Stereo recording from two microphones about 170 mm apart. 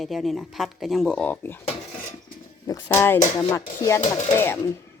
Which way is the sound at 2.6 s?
15° left (ahead or behind).